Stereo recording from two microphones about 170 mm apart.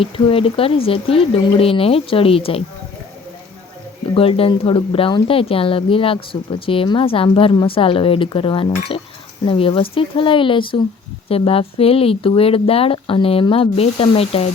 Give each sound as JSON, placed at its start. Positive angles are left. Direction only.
{"t": 0.0, "sound": "a woman's voice", "side_deg": 35}
{"t": 4.1, "sound": "a woman's voice", "side_deg": 35}